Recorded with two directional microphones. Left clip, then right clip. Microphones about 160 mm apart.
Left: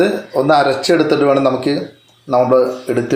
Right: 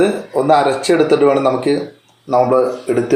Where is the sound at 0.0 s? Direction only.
15° left (ahead or behind).